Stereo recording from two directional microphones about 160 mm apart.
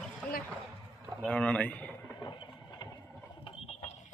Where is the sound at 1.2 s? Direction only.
5° left (ahead or behind).